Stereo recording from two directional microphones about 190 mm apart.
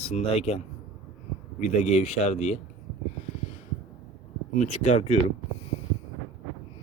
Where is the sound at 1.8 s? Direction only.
35° left (ahead or behind).